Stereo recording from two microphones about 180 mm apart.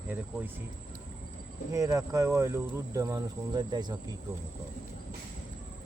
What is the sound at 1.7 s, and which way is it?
A woman's voice, 20° right (ahead or behind).